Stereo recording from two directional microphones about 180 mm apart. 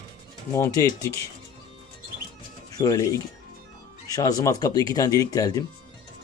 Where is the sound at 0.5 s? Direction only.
20° left (ahead or behind).